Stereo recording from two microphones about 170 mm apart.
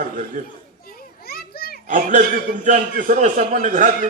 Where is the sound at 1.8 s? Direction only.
50° right (ahead or behind).